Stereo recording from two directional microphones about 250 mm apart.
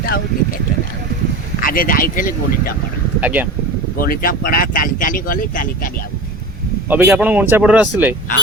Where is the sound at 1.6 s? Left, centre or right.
Left.